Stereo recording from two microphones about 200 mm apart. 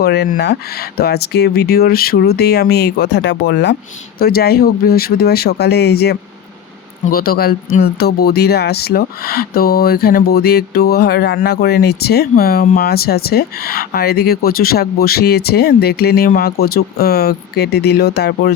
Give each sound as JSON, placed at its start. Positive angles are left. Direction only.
{"t": 0.0, "sound": "speech", "side_deg": 55}